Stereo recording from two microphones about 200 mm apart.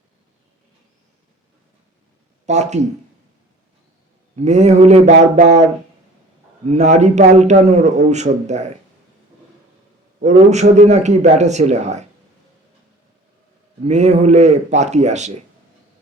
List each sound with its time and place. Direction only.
2.5 s a man's voice: 35° right (ahead or behind)
4.4 s a man's voice: 35° right (ahead or behind)
6.7 s a man's voice: 35° right (ahead or behind)
10.2 s a man's voice: 35° right (ahead or behind)
13.8 s a man's voice: 35° right (ahead or behind)